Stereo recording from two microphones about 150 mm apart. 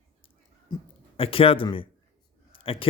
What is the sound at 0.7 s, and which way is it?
Speech, 30° left (ahead or behind).